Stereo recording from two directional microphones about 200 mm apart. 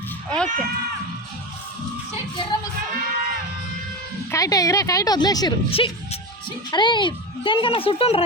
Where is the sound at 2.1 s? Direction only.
25° left (ahead or behind).